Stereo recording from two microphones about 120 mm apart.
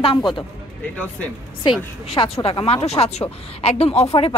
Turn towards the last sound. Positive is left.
turn(degrees=55)  # may be behind; listen again after turning